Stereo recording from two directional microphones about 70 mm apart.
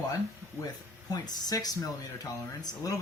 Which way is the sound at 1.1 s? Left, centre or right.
Left.